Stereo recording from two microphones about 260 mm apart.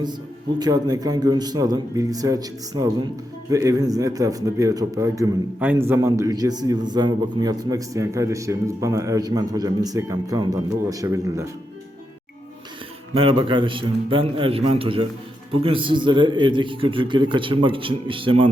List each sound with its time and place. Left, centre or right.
0.6 s a man's voice: centre
13.1 s a man's voice: centre